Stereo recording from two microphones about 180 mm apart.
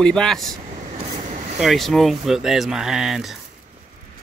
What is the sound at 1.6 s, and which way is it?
Speech, centre (ahead or behind).